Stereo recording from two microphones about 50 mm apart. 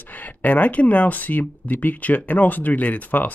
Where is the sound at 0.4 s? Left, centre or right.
Left.